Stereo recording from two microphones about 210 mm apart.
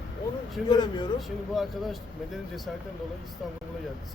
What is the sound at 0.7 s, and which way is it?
Speech, 20° left (ahead or behind).